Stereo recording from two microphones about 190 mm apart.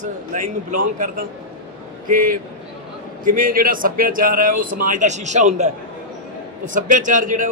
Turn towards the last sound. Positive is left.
turn(degrees=-45)  # may be behind; listen again after turning